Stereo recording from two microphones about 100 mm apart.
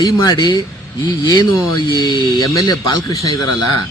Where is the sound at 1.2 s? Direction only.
35° left (ahead or behind).